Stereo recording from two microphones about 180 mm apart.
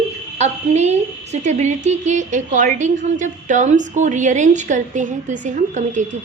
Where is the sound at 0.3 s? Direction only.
40° right (ahead or behind).